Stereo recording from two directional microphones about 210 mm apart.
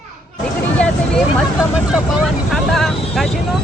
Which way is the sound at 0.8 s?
5° left (ahead or behind).